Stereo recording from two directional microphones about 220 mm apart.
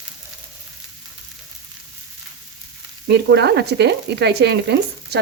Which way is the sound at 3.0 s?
50° right (ahead or behind).